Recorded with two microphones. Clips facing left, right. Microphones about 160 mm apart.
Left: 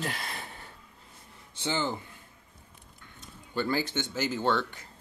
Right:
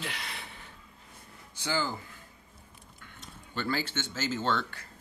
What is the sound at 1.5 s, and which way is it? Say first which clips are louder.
Speech: left 1 dB; 25° left (ahead or behind).